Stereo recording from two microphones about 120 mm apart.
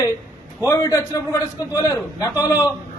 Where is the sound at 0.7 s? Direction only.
30° left (ahead or behind).